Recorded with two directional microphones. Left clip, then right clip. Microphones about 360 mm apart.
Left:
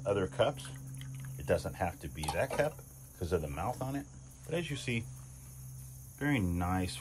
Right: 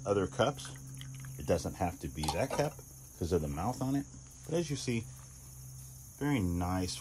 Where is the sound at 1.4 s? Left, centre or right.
Centre.